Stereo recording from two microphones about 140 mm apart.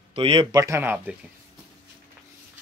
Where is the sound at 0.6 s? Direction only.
15° right (ahead or behind).